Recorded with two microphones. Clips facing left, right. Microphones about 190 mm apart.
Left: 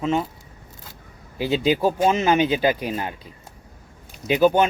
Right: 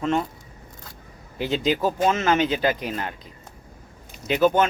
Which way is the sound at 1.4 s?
10° left (ahead or behind).